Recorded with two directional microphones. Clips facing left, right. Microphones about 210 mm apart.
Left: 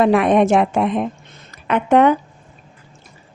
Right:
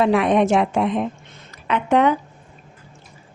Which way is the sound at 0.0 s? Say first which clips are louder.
Left 3 dB; 50° left (ahead or behind).